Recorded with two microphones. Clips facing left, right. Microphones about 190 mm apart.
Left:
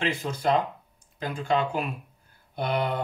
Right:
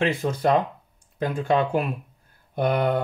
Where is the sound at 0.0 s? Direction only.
55° right (ahead or behind).